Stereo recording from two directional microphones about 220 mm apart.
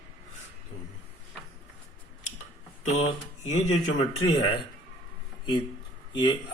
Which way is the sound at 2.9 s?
30° left (ahead or behind).